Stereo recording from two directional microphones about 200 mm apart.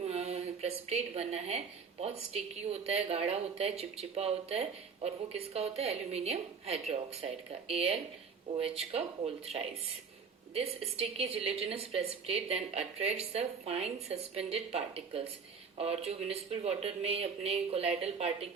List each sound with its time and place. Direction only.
0.0 s a woman's voice: 30° right (ahead or behind)